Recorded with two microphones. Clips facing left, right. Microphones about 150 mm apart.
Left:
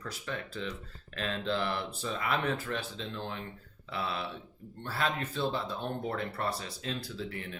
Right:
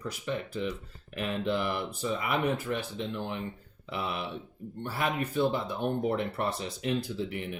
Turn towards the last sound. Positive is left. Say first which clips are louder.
# right 5 dB
turn(degrees=-15)  # may be behind; listen again after turning